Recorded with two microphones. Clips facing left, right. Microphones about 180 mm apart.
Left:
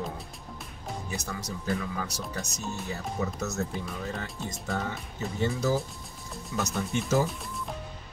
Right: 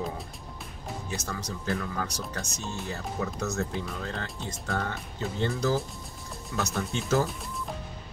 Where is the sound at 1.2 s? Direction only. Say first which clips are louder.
Right 1 dB; centre (ahead or behind).